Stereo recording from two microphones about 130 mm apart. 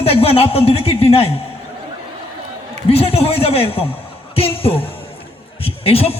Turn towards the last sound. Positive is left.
turn(degrees=50)  # may be behind; listen again after turning